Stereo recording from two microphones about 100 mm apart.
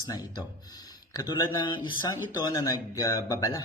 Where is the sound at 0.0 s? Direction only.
40° left (ahead or behind).